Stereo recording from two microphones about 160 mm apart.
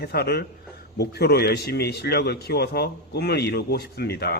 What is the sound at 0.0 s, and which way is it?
A man's voice, 90° left.